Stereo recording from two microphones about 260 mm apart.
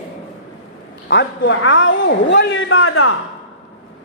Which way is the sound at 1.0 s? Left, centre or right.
Left.